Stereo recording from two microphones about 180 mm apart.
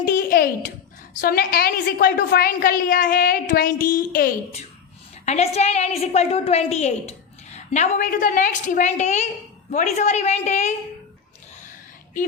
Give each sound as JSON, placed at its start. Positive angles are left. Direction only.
{"t": 0.0, "sound": "a child's voice", "side_deg": 55}
{"t": 5.2, "sound": "a woman's voice", "side_deg": 40}